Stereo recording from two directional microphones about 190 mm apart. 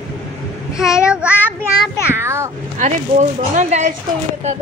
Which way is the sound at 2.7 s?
40° right (ahead or behind).